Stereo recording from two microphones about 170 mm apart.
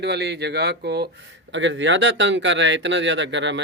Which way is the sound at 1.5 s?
90° right.